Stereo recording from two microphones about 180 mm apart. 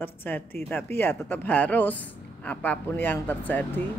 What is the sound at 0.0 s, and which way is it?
Speech, 10° left (ahead or behind).